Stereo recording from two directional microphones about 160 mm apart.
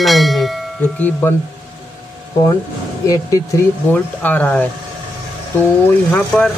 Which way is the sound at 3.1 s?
20° left (ahead or behind).